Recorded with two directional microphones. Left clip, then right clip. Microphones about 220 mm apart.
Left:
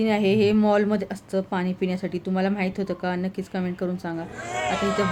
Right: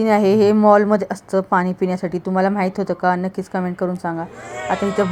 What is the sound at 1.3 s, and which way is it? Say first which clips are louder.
Speech: right 8 dB; 20° right (ahead or behind).